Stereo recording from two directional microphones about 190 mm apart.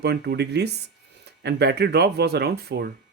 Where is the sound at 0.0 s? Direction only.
60° right (ahead or behind).